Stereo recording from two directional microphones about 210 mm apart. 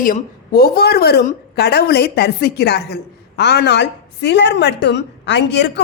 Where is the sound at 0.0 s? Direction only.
45° left (ahead or behind).